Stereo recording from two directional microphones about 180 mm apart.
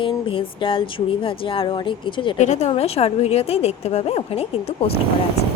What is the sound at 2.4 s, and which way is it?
Speech, 40° left (ahead or behind).